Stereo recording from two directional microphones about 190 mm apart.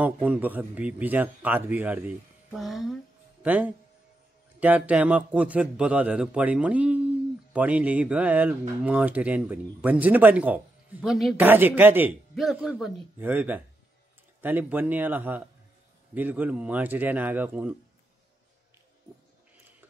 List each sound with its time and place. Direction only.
0.0 s speech: 5° right (ahead or behind)